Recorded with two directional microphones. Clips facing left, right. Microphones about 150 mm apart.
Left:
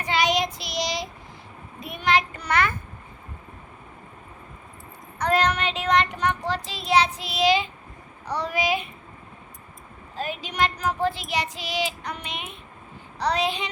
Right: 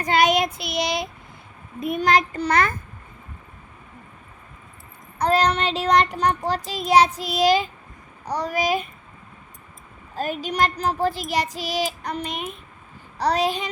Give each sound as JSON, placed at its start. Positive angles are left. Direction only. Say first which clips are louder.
{"t": 0.0, "sound": "child singing", "louder": "right 4 dB", "side_deg": -50}
{"t": 1.8, "sound": "child singing", "louder": "right 4 dB", "side_deg": -45}
{"t": 5.2, "sound": "child singing", "louder": "right 3 dB", "side_deg": -30}
{"t": 10.2, "sound": "child singing", "louder": "right 3 dB", "side_deg": -45}